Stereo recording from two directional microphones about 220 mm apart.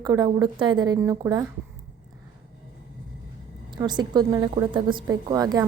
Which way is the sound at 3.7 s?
20° right (ahead or behind).